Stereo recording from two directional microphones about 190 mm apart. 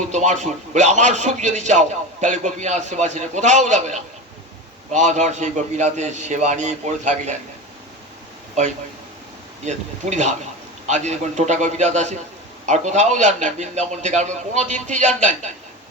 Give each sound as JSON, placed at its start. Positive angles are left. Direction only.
{"t": 0.1, "sound": "a man's voice", "side_deg": -40}
{"t": 9.6, "sound": "a man's voice", "side_deg": -35}